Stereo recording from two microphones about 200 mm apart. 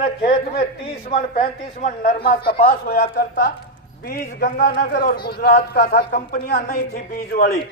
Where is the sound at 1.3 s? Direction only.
40° left (ahead or behind).